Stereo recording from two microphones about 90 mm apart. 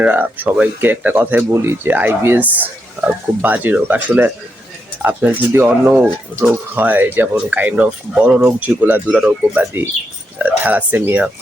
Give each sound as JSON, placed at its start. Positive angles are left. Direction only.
{"t": 0.0, "sound": "speech", "side_deg": -20}
{"t": 8.4, "sound": "speech", "side_deg": -25}